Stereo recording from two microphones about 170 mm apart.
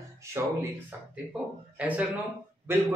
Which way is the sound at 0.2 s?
15° right (ahead or behind).